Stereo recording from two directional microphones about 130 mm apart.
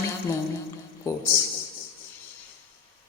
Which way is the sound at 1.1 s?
25° left (ahead or behind).